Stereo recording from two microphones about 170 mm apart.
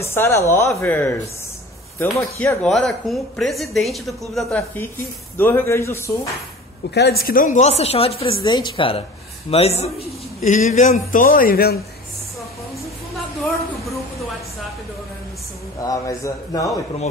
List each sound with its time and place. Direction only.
0.0 s a man's voice: 15° left (ahead or behind)
6.9 s a woman's voice: 75° left (ahead or behind)
15.8 s a man's voice: 20° left (ahead or behind)